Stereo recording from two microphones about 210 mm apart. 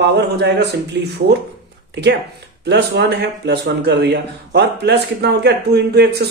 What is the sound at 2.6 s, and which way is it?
Speech, 55° right (ahead or behind).